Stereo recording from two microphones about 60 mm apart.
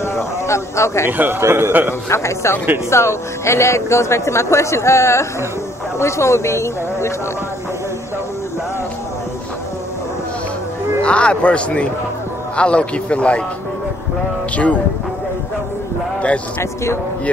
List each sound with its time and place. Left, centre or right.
0.0 s speech: left
1.0 s a man's voice: right
1.7 s a man's voice: right
2.0 s speech: left
11.1 s a man's voice: centre
14.5 s a man's voice: left
16.2 s a man's voice: left